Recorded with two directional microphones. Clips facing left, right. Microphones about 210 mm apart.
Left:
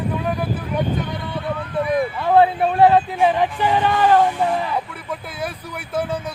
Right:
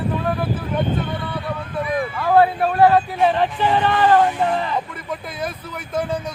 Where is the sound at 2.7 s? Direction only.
20° left (ahead or behind).